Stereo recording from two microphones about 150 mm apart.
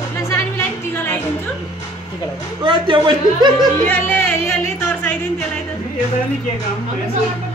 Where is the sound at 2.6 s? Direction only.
30° right (ahead or behind).